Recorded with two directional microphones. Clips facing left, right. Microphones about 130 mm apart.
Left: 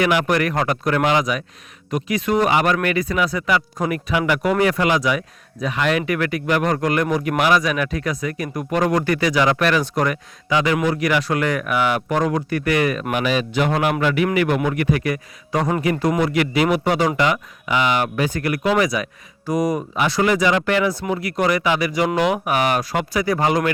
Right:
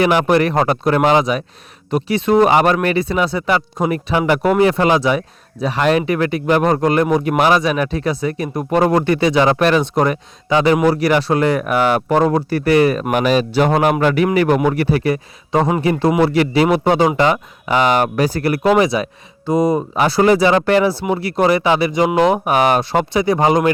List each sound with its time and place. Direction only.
0.0 s a man's voice: 30° right (ahead or behind)